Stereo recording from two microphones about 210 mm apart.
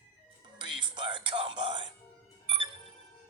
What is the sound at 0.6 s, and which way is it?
Music, 20° right (ahead or behind).